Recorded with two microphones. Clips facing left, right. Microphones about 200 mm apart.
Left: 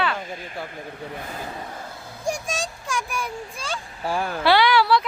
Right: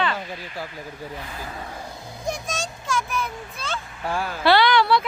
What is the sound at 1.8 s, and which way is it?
Music, 15° right (ahead or behind).